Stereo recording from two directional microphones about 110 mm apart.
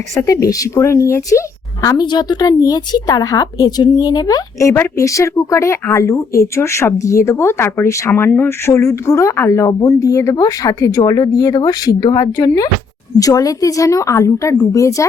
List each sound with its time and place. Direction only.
0.2 s speech: 30° left (ahead or behind)
2.0 s speech: 40° left (ahead or behind)